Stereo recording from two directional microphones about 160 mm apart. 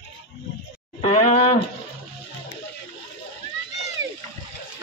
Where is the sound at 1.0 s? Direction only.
40° left (ahead or behind).